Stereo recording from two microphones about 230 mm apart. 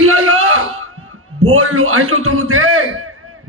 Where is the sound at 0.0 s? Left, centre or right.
Right.